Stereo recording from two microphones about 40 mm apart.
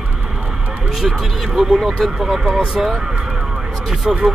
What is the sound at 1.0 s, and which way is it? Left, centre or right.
Speech, centre.